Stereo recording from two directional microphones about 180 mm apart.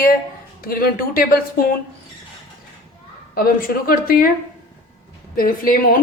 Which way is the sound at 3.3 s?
55° left (ahead or behind).